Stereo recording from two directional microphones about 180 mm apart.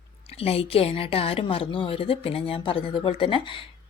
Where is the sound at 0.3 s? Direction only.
35° left (ahead or behind).